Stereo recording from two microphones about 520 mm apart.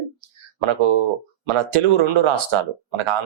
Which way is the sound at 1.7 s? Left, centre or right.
Right.